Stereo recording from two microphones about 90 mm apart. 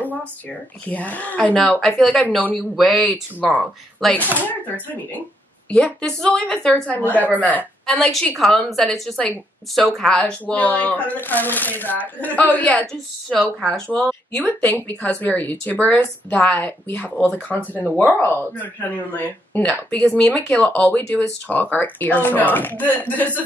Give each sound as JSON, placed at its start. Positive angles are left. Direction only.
{"t": 0.8, "sound": "a woman's voice", "side_deg": 15}
{"t": 1.6, "sound": "a woman's voice", "side_deg": 5}
{"t": 2.5, "sound": "speech", "side_deg": 0}
{"t": 3.3, "sound": "speech", "side_deg": -15}
{"t": 4.0, "sound": "speech", "side_deg": 0}
{"t": 4.5, "sound": "a woman's voice", "side_deg": 20}
{"t": 7.9, "sound": "a woman's voice", "side_deg": 5}
{"t": 14.7, "sound": "a woman's voice", "side_deg": 20}